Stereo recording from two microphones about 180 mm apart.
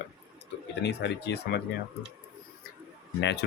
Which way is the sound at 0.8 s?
70° left (ahead or behind).